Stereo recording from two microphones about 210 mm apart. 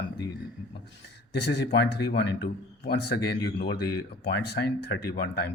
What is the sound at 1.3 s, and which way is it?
Speech, 55° left (ahead or behind).